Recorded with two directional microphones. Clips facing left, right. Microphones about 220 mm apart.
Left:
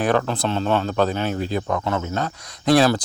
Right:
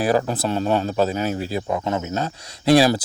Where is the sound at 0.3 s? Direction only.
10° right (ahead or behind).